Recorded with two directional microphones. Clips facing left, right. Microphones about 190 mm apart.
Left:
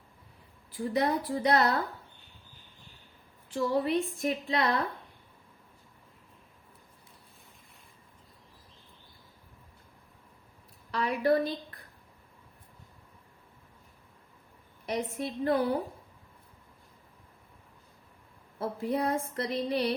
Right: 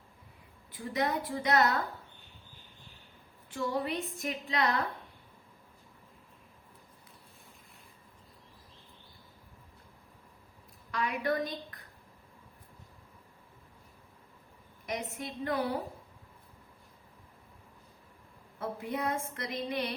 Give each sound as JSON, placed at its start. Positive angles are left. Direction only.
{"t": 0.9, "sound": "speech", "side_deg": 30}
{"t": 3.5, "sound": "a sound", "side_deg": 30}
{"t": 4.5, "sound": "speech", "side_deg": 30}
{"t": 10.9, "sound": "a woman's voice", "side_deg": 30}
{"t": 14.8, "sound": "speech", "side_deg": 30}
{"t": 18.6, "sound": "speech", "side_deg": 30}